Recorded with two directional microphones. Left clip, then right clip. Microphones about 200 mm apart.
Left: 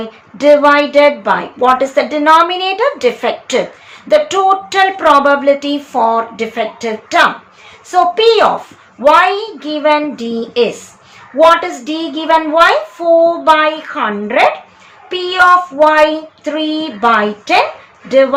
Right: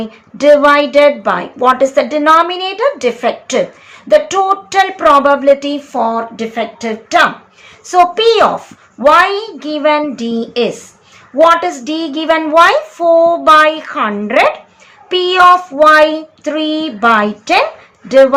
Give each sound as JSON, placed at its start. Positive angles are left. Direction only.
{"t": 0.3, "sound": "a woman's voice", "side_deg": -10}
{"t": 15.1, "sound": "child singing", "side_deg": -20}
{"t": 15.8, "sound": "a woman's voice", "side_deg": -15}